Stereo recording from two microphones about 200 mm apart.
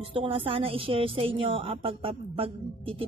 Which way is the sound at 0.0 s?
25° right (ahead or behind).